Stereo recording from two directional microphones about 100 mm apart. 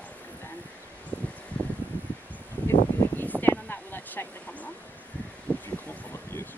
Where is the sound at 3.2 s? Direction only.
20° left (ahead or behind).